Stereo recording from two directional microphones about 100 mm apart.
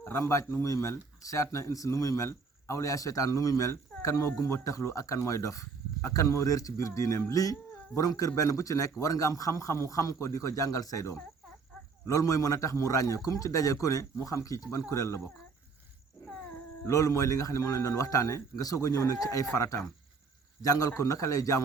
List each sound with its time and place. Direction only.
0.0 s speech: 30° left (ahead or behind)
16.8 s speech: 35° left (ahead or behind)